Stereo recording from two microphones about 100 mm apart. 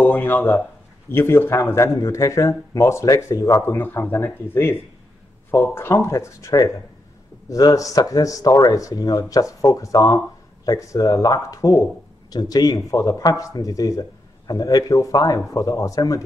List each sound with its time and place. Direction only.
0.0 s speech: 20° left (ahead or behind)